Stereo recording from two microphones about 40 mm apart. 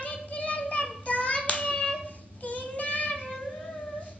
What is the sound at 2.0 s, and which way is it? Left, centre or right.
Child singing, left.